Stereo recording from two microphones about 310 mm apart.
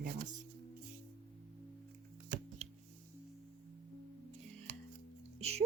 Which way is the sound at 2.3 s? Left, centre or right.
Right.